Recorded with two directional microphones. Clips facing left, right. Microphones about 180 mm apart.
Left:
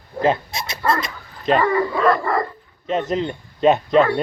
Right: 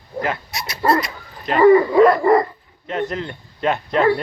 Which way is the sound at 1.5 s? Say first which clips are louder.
Right 9 dB; 20° right (ahead or behind).